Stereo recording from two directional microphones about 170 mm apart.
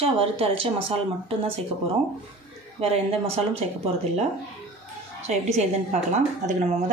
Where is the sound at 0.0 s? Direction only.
35° right (ahead or behind).